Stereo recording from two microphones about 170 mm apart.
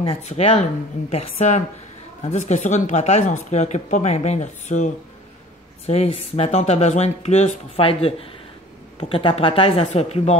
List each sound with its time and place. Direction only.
0.0 s speech: 35° left (ahead or behind)